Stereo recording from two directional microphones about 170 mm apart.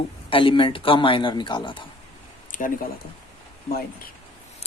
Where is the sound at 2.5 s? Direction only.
50° left (ahead or behind).